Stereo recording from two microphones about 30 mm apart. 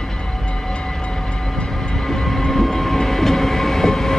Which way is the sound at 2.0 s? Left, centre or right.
Centre.